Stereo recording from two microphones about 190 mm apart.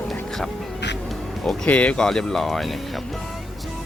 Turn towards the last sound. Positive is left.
turn(degrees=0)  # may be behind; listen again after turning